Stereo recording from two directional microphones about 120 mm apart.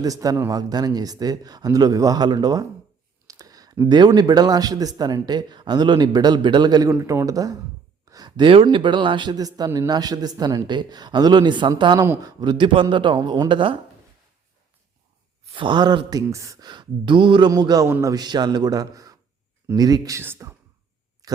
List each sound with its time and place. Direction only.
0.0 s speech: 30° right (ahead or behind)
3.2 s a sound: 30° right (ahead or behind)
3.8 s speech: 40° right (ahead or behind)
15.4 s speech: 45° right (ahead or behind)
17.5 s speech: 30° right (ahead or behind)
17.8 s speech: 20° right (ahead or behind)
18.1 s speech: 35° right (ahead or behind); by 20.6 s 20° right (ahead or behind)
21.2 s a sound: 30° right (ahead or behind)